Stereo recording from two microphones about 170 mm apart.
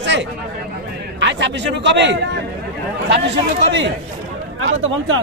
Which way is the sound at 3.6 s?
90° right.